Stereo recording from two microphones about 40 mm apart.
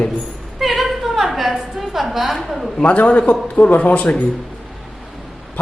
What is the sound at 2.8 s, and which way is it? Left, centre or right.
A man's voice, left.